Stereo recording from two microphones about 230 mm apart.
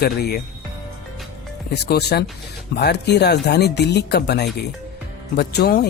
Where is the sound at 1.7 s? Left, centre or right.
Left.